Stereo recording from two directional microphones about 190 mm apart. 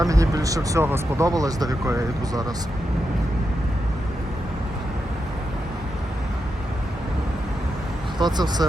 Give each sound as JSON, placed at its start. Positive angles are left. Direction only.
{"t": 0.0, "sound": "speech", "side_deg": -20}
{"t": 8.2, "sound": "speech", "side_deg": -20}